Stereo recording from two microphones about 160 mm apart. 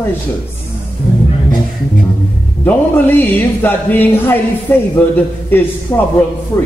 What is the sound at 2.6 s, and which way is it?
Speech, 10° left (ahead or behind).